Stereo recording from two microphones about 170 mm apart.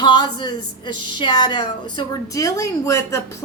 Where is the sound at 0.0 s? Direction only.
25° left (ahead or behind).